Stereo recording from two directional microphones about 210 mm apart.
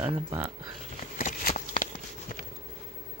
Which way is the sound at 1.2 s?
40° left (ahead or behind).